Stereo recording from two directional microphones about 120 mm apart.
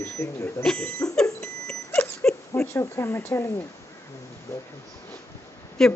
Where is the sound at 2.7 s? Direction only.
25° left (ahead or behind).